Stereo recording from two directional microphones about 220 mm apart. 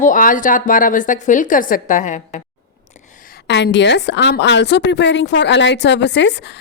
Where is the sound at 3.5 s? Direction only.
55° left (ahead or behind).